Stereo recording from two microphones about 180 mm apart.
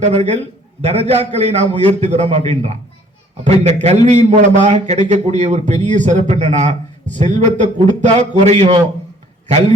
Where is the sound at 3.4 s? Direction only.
35° right (ahead or behind).